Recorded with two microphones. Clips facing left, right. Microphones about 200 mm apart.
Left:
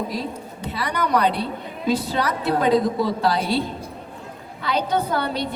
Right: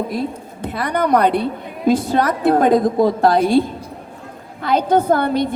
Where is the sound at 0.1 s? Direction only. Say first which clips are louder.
Right 5 dB; 55° right (ahead or behind).